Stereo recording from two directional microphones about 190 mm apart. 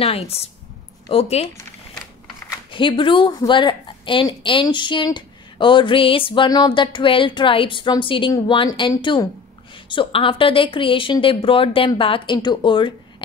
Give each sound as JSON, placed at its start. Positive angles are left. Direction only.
{"t": 0.3, "sound": "speech", "side_deg": 30}
{"t": 2.7, "sound": "a woman's voice", "side_deg": 25}